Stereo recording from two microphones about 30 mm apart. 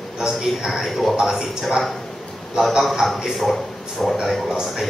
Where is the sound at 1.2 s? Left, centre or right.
Centre.